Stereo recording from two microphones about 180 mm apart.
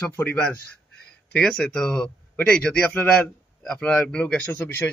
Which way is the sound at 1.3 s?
5° left (ahead or behind).